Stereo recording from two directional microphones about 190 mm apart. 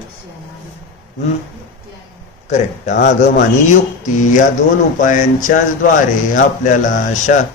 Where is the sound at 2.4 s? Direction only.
40° left (ahead or behind).